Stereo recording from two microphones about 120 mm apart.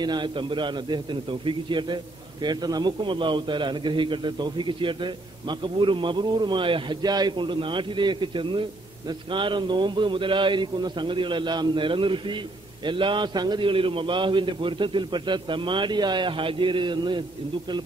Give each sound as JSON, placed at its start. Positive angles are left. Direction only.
{"t": 0.0, "sound": "a man's voice", "side_deg": -40}